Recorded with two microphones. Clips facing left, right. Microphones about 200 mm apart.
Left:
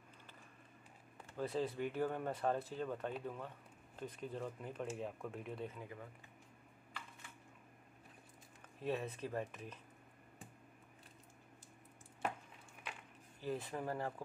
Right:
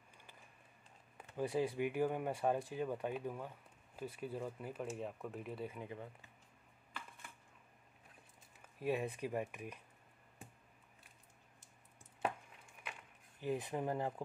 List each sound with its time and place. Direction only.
1.3 s speech: 15° right (ahead or behind)
5.8 s speech: 20° right (ahead or behind)
8.7 s speech: 10° right (ahead or behind)
13.4 s speech: 15° right (ahead or behind)